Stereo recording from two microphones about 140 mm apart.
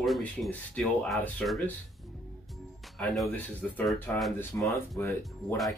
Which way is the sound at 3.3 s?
10° left (ahead or behind).